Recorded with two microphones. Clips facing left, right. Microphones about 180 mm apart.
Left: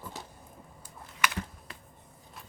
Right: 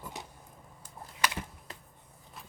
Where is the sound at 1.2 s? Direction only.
30° right (ahead or behind).